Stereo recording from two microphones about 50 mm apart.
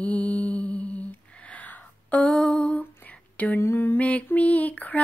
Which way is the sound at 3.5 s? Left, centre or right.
Left.